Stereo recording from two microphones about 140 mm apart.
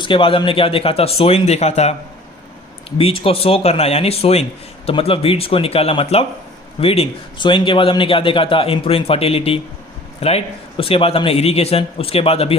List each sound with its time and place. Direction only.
0.0 s a man's voice: 40° left (ahead or behind)
3.0 s a man's voice: 40° left (ahead or behind)